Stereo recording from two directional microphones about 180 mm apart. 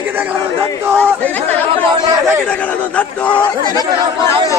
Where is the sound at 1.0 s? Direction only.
5° left (ahead or behind).